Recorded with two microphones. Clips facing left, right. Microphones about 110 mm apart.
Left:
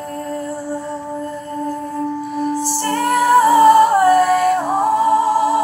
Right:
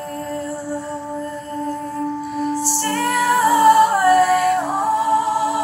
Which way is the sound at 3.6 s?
Centre (ahead or behind).